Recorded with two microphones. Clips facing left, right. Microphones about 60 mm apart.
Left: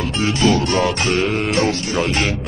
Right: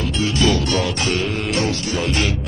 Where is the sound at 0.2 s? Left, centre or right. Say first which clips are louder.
Left 2 dB; left.